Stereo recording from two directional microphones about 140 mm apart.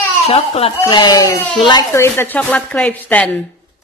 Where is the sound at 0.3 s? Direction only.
45° left (ahead or behind).